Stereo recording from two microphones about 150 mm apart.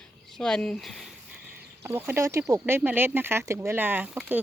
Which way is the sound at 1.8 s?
15° right (ahead or behind).